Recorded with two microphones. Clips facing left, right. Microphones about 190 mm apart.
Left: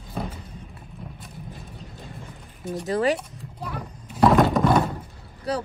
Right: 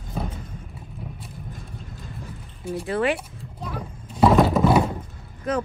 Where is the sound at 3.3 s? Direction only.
Centre (ahead or behind).